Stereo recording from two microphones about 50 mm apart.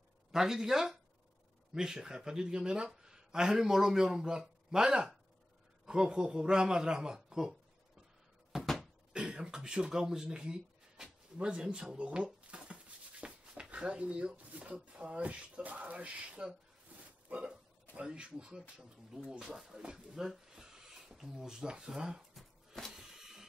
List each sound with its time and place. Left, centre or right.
0.3 s speech: centre
7.2 s a sound: centre
8.5 s cupboard open or close: centre
9.1 s speech: centre
12.4 s a sound: right
15.6 s speech: right
16.9 s hiccup: right
17.3 s speech: right; by 22.2 s centre
22.9 s a sound: centre